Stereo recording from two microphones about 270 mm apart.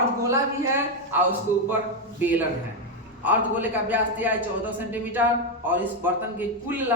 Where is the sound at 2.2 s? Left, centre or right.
Centre.